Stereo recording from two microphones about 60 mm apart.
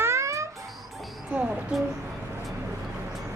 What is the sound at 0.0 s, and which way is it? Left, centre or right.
Babbling, right.